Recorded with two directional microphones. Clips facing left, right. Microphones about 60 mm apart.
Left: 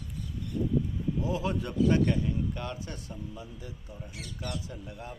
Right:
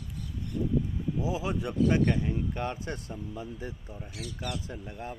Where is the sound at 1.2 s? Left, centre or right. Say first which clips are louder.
Right 1 dB; centre; by 5.1 s right.